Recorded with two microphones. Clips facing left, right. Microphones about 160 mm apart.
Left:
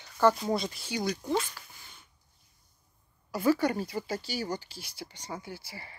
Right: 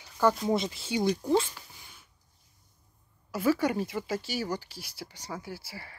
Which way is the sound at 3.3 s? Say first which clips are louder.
Even; 5° right (ahead or behind).